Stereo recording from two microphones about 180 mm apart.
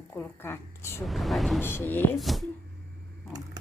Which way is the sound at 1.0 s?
Centre (ahead or behind).